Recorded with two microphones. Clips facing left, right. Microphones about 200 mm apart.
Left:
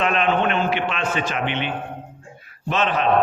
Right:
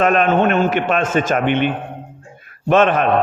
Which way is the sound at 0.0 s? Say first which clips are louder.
Right 6 dB; 45° right (ahead or behind).